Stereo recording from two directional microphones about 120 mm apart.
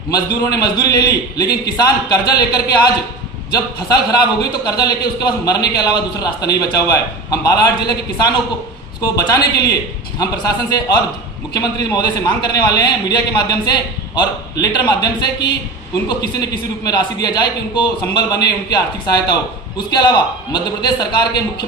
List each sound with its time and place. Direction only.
0.1 s a man's voice: 35° left (ahead or behind)